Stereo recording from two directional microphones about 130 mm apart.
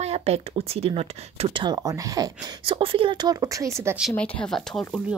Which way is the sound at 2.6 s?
40° right (ahead or behind).